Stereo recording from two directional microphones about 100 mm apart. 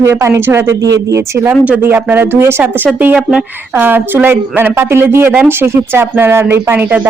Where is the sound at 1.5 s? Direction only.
15° right (ahead or behind).